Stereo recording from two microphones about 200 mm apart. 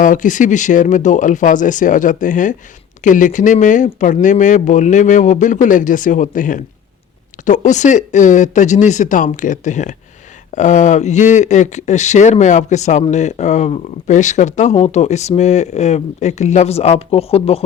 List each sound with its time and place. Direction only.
0.0 s speech: 40° left (ahead or behind)